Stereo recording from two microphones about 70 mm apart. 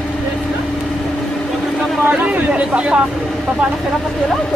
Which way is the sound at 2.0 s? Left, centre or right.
Right.